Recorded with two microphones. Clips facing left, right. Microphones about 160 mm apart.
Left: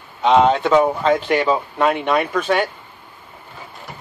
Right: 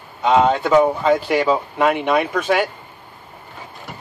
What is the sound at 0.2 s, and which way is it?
Speech, 5° right (ahead or behind).